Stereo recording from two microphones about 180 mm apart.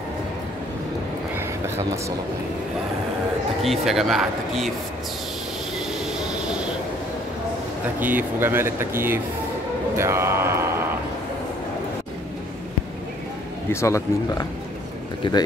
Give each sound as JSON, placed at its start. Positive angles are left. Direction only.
{"t": 3.6, "sound": "speech", "side_deg": 0}
{"t": 8.0, "sound": "speech", "side_deg": -10}
{"t": 13.7, "sound": "speech", "side_deg": 15}
{"t": 15.2, "sound": "speech", "side_deg": 25}